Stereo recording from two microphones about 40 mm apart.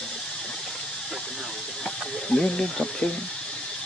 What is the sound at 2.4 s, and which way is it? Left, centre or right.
Speech, centre.